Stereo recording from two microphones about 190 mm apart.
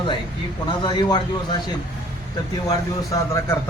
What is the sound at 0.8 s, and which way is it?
A man's voice, 20° left (ahead or behind).